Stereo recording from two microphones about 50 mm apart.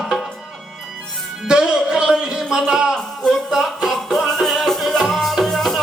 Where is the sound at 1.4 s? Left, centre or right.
Centre.